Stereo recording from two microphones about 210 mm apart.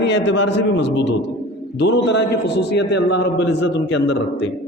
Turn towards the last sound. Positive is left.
turn(degrees=55)  # may be behind; listen again after turning